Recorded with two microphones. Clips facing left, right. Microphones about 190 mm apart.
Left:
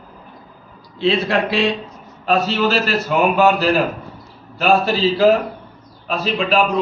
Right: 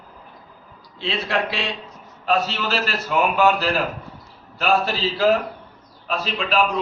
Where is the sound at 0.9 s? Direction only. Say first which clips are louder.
Left 7 dB; 40° left (ahead or behind).